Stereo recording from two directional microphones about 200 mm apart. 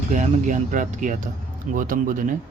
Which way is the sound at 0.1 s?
40° right (ahead or behind).